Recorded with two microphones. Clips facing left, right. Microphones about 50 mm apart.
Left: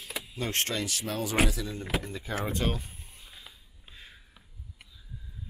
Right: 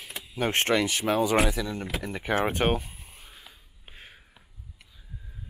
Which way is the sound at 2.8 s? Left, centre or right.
Right.